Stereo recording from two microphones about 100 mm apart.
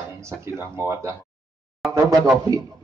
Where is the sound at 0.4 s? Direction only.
30° right (ahead or behind).